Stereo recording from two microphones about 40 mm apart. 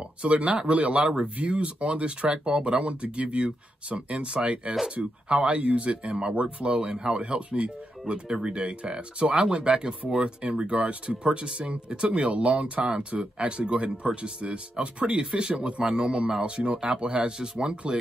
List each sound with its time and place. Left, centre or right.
0.0 s speech: right